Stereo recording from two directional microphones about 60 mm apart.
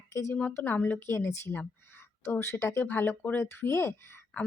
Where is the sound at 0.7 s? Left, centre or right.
Left.